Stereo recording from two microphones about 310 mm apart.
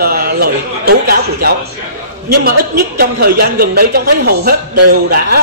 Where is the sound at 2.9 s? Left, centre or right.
Right.